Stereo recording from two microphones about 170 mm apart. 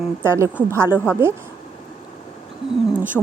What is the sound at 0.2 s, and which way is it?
Speech, 15° right (ahead or behind).